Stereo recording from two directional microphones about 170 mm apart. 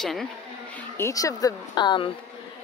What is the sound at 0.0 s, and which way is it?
Speech, centre (ahead or behind).